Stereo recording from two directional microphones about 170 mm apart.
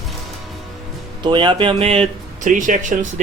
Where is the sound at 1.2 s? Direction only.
30° right (ahead or behind); by 3.1 s 50° right (ahead or behind).